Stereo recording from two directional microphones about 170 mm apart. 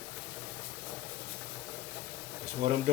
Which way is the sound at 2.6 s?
45° right (ahead or behind).